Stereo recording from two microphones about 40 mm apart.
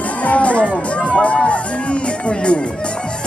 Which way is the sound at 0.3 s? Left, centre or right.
Left.